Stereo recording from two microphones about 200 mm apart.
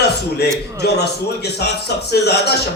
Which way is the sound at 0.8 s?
55° left (ahead or behind).